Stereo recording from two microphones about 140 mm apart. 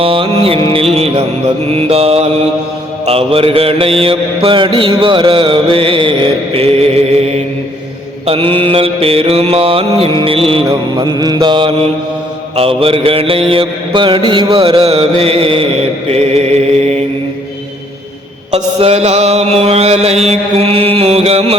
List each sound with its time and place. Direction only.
0.0 s mantra: 40° right (ahead or behind)
8.3 s mantra: 40° right (ahead or behind)
10.7 s mantra: 30° right (ahead or behind); by 17.0 s 50° right (ahead or behind)
18.5 s mantra: 50° right (ahead or behind)